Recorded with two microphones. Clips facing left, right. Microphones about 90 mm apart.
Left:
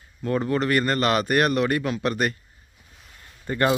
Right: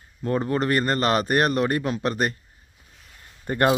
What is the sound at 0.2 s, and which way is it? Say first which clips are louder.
A man's voice: even; 25° right (ahead or behind).